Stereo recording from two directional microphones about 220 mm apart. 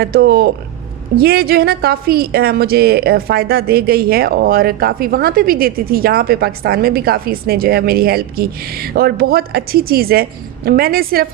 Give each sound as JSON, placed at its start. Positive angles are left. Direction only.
{"t": 0.0, "sound": "a woman's voice", "side_deg": -45}